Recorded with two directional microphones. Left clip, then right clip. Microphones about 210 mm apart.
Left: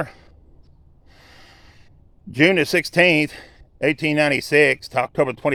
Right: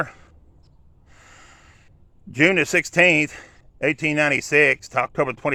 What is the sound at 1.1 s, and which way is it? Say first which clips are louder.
Gasp: even; 15° left (ahead or behind).